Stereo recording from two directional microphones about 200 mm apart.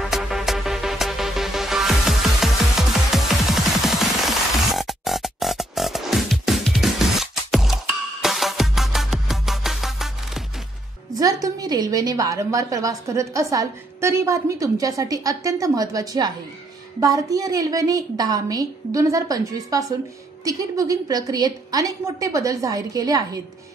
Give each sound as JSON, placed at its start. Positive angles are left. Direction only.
{"t": 0.0, "sound": "music", "side_deg": 0}
{"t": 11.1, "sound": "a woman's voice", "side_deg": -20}